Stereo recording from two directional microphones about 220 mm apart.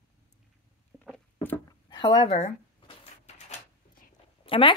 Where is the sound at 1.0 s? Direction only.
5° left (ahead or behind).